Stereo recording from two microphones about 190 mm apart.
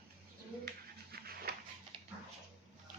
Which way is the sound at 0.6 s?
55° right (ahead or behind).